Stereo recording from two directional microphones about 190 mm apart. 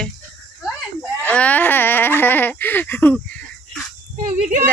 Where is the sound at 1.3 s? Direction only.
10° left (ahead or behind).